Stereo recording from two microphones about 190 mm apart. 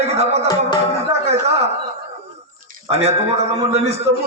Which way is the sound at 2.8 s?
35° right (ahead or behind).